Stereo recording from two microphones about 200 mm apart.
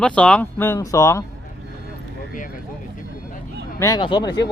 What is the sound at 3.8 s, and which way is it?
Speech, 20° left (ahead or behind).